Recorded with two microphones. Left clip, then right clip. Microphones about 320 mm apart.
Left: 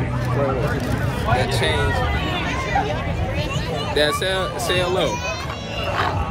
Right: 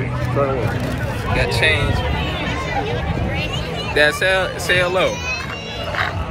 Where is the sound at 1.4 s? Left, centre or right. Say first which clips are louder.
Right 8 dB; centre.